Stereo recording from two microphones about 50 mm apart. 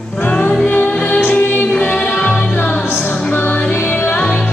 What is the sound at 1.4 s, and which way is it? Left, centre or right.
A capella, left.